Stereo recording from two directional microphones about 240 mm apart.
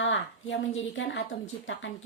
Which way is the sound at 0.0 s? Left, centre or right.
Left.